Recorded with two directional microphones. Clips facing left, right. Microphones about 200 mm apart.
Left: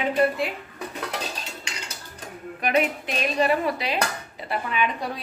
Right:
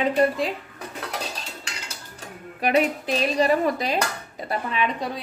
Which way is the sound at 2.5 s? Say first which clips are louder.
Right 2 dB; 30° right (ahead or behind).